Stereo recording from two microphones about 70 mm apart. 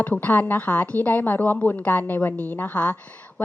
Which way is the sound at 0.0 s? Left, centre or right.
Left.